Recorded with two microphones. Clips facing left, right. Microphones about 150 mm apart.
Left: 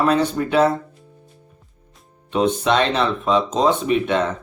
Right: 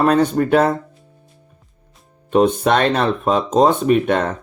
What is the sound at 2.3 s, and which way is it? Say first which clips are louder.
Speech: right 3 dB; 50° right (ahead or behind).